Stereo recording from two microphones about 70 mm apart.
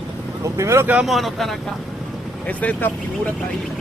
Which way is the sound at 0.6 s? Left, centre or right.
Right.